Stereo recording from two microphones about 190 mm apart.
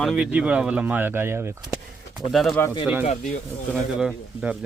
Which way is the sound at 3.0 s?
40° left (ahead or behind).